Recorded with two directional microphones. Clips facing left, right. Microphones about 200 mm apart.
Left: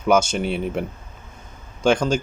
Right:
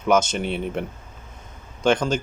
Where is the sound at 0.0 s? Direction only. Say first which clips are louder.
Left 2 dB; centre (ahead or behind).